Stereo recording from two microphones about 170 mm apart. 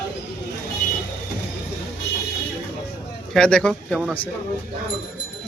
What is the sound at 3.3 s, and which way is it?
Speech, 5° left (ahead or behind).